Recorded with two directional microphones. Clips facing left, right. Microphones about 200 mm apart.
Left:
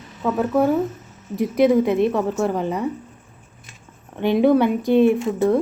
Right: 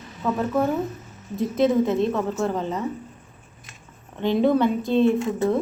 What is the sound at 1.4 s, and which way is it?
A woman's voice, 15° left (ahead or behind).